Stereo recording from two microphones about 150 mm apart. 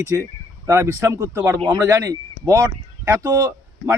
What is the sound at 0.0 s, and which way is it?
Speech, 20° right (ahead or behind).